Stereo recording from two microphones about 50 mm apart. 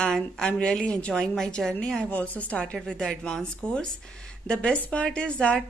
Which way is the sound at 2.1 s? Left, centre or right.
Left.